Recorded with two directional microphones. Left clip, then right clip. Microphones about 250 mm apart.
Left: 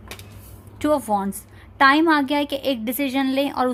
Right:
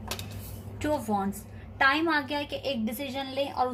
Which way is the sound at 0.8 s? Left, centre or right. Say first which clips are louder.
Left 8 dB; left.